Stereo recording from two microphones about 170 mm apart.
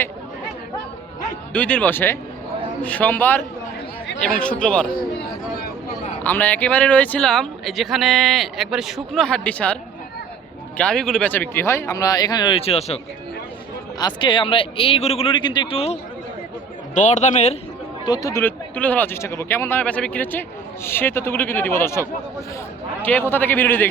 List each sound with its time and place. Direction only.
1.5 s speech: 10° left (ahead or behind)
6.2 s speech: 10° left (ahead or behind)
10.8 s speech: 5° left (ahead or behind); by 13.0 s 35° left (ahead or behind)
14.0 s a man's voice: 30° left (ahead or behind)
18.0 s speech: 25° left (ahead or behind)
23.3 s speech: 10° left (ahead or behind)